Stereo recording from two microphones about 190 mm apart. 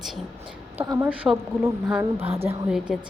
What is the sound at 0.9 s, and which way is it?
A woman's voice, 15° right (ahead or behind).